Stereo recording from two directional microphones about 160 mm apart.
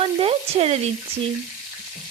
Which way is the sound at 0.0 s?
35° right (ahead or behind).